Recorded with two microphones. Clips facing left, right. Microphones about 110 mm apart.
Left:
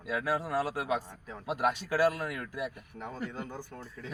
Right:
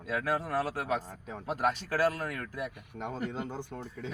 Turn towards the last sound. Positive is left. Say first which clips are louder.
# right 4 dB
turn(degrees=-20)  # may be behind; listen again after turning